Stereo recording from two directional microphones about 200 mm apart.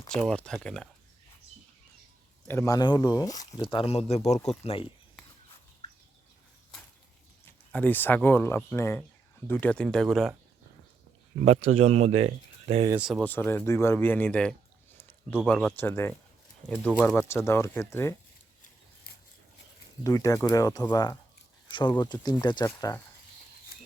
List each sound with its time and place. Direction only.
0.1 s speech: 5° left (ahead or behind)
2.5 s speech: 15° left (ahead or behind)
7.4 s speech: 10° left (ahead or behind)
11.7 s speech: 35° right (ahead or behind)
12.9 s speech: 5° right (ahead or behind)
14.9 s a sound: 10° left (ahead or behind)
15.4 s speech: 5° left (ahead or behind)
20.1 s speech: 15° left (ahead or behind)